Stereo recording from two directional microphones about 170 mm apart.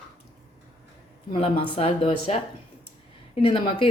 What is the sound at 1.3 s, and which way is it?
Speech, 35° left (ahead or behind).